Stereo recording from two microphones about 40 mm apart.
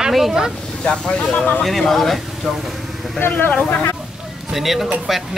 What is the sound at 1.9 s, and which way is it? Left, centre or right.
Speech, centre.